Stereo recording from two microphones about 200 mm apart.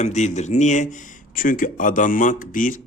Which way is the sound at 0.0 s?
35° left (ahead or behind).